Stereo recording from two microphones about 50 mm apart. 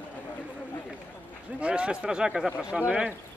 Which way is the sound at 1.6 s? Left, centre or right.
Right.